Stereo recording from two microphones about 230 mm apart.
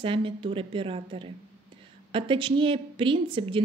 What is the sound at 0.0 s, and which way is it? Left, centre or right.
A woman's voice, right.